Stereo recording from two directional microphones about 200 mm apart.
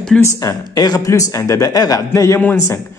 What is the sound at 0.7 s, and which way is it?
A man's voice, 20° left (ahead or behind).